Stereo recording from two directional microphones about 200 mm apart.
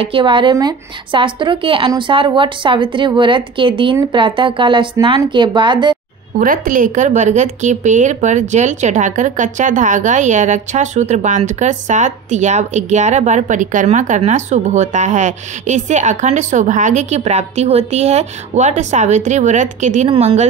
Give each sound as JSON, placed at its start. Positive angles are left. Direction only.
{"t": 0.0, "sound": "a woman's voice", "side_deg": -25}
{"t": 6.3, "sound": "a woman's voice", "side_deg": -45}